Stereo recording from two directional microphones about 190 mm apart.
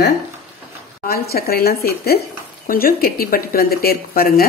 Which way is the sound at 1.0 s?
55° left (ahead or behind).